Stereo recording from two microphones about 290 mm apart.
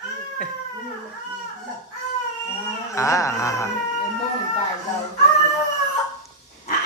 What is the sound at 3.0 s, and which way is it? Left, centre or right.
Speech, centre.